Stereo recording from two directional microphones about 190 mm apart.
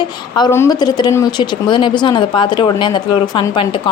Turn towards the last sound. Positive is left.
turn(degrees=25)  # may be behind; listen again after turning